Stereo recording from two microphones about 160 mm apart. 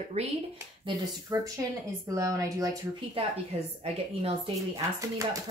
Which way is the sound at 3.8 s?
40° right (ahead or behind).